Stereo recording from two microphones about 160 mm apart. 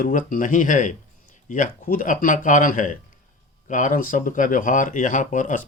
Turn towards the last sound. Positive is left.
turn(degrees=55)  # may be behind; listen again after turning